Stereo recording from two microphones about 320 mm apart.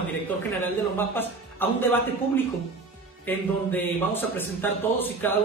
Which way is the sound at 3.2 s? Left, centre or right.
Centre.